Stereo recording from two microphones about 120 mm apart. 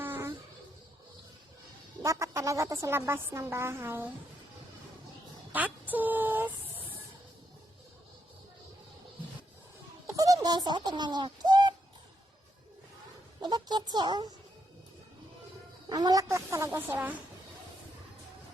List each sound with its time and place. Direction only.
0.0 s a sound: 20° right (ahead or behind)
2.0 s speech: 25° right (ahead or behind)
5.5 s a sound: 15° right (ahead or behind)
10.1 s bird: 30° right (ahead or behind)
13.4 s speech: 35° right (ahead or behind)
15.9 s speech: 35° right (ahead or behind)
16.9 s a woman's voice: 15° right (ahead or behind)